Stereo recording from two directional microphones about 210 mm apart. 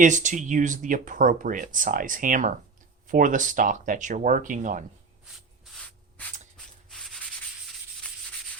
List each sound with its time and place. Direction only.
0.0 s speech: 35° right (ahead or behind)
6.2 s a sound: 5° left (ahead or behind)
6.9 s sanding: centre (ahead or behind)